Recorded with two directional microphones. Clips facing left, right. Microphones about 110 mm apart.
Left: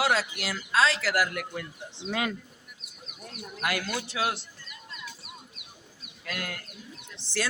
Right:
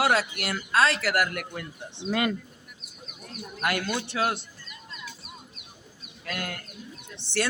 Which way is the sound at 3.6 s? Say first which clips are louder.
Right 3 dB; 55° right (ahead or behind).